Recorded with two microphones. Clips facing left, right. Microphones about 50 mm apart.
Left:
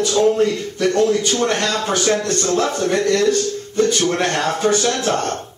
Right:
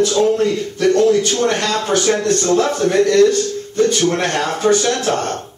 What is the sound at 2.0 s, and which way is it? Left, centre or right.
Music, centre.